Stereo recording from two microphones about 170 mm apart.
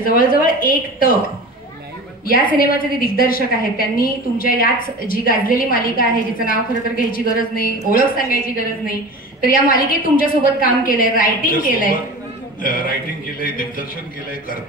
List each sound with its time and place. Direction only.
0.0 s a woman's voice: 55° left (ahead or behind)
2.5 s a woman's voice: 60° left (ahead or behind)
13.4 s a woman's voice: 55° left (ahead or behind)